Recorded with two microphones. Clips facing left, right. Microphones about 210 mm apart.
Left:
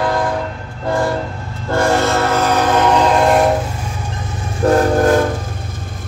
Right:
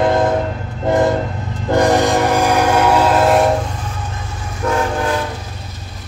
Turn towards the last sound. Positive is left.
turn(degrees=45)  # may be behind; listen again after turning